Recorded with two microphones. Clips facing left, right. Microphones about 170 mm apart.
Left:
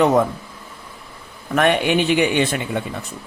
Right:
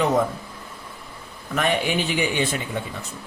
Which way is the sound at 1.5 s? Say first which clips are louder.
Left 6 dB; 65° left (ahead or behind).